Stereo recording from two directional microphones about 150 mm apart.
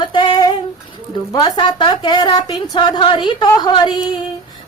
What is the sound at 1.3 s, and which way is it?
Speech, 30° left (ahead or behind).